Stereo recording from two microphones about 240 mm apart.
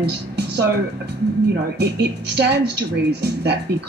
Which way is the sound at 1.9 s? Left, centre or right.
Right.